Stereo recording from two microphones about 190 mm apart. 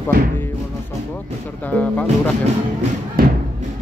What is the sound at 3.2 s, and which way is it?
Thump, 50° right (ahead or behind).